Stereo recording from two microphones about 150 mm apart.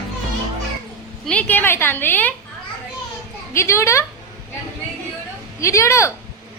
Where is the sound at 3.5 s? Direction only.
20° left (ahead or behind).